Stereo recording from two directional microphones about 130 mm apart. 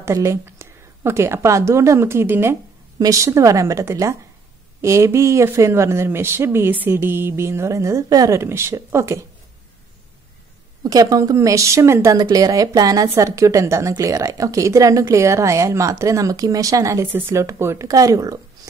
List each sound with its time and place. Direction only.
0.0 s a woman's voice: 20° right (ahead or behind)
10.8 s a woman's voice: 30° right (ahead or behind)